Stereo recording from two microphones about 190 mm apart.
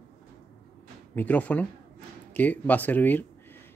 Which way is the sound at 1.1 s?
10° left (ahead or behind).